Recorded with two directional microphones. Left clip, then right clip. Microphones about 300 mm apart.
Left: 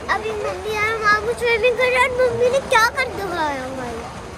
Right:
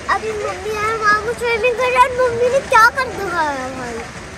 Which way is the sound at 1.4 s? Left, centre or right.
Centre.